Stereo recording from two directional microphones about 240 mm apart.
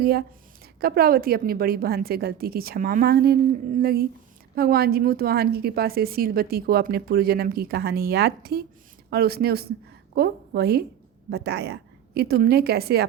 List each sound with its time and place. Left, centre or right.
0.0 s a woman's voice: right